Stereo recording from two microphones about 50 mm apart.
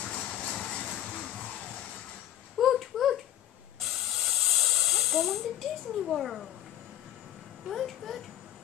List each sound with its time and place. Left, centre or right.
0.0 s vehicle: left
2.6 s a sound: centre
3.8 s hiss: centre
7.6 s a child's voice: centre